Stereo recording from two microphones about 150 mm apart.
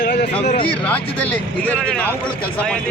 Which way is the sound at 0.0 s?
90° left.